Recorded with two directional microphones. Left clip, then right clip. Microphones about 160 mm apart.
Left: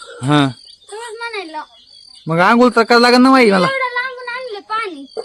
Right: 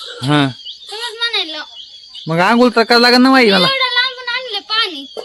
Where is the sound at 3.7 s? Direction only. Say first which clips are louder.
Right 4 dB; 20° left (ahead or behind).